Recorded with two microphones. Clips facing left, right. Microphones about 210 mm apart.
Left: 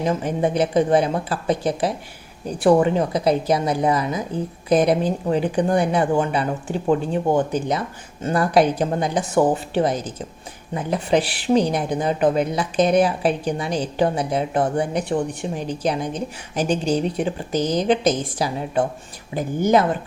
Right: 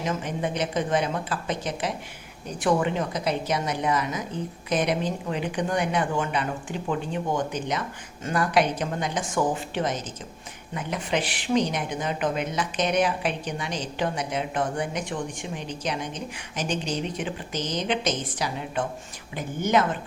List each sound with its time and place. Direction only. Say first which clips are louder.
0.0 s a woman's voice: left 7 dB; 35° left (ahead or behind)